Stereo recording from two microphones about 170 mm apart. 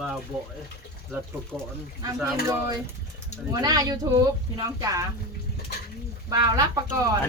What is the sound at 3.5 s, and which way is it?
Speech, 20° right (ahead or behind).